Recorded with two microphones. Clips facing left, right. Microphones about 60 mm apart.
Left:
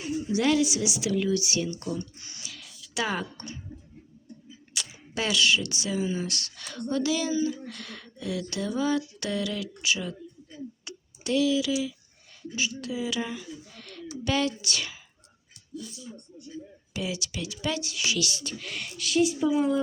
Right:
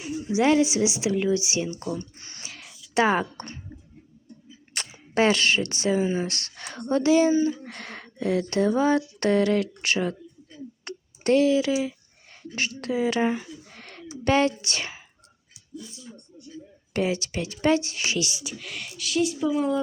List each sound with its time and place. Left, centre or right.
0.3 s speech: right
2.1 s a sound: right
2.9 s speech: right
4.7 s speech: right
10.8 s a sound: right
12.5 s speech: right
16.9 s speech: right
18.5 s speech: centre